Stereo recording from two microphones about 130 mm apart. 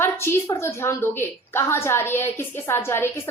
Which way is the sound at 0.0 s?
20° left (ahead or behind).